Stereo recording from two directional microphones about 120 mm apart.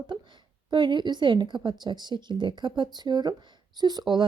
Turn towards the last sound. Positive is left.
turn(degrees=-35)  # may be behind; listen again after turning